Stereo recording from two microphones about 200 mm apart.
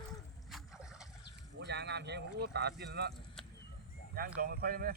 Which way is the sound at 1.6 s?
60° right (ahead or behind).